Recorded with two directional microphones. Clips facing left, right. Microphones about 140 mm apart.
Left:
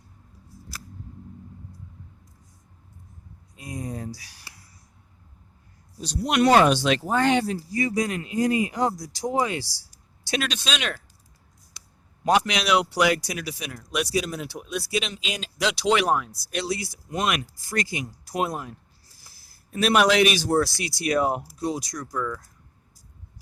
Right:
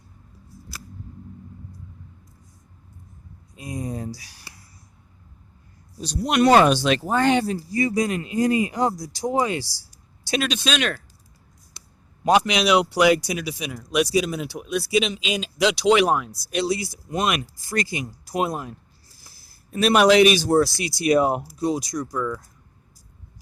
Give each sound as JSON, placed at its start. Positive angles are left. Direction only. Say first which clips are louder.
{"t": 3.5, "sound": "a sound", "louder": "right 3 dB", "side_deg": -20}
{"t": 6.2, "sound": "speech", "louder": "right 2 dB", "side_deg": -40}
{"t": 10.6, "sound": "speech", "louder": "right 5 dB", "side_deg": 0}
{"t": 12.2, "sound": "speech", "louder": "right 3 dB", "side_deg": -20}
{"t": 19.7, "sound": "speech", "louder": "right 4 dB", "side_deg": -30}
{"t": 21.9, "sound": "speech", "louder": "right 4 dB", "side_deg": -15}